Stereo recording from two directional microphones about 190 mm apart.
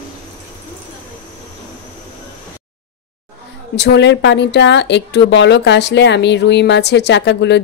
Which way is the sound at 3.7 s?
65° left (ahead or behind).